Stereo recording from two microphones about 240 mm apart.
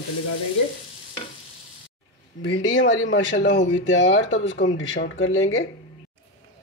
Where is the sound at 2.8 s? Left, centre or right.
Left.